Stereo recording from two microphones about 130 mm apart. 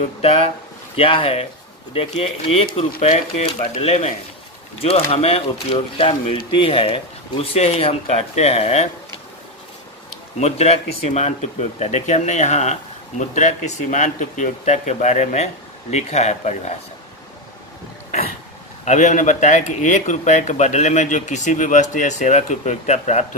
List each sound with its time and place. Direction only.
0.2 s speech: 50° left (ahead or behind)
10.4 s speech: 55° left (ahead or behind)
18.9 s speech: 75° left (ahead or behind)